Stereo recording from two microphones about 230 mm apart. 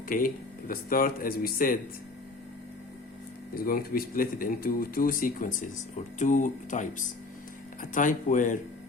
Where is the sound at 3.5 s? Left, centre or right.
Left.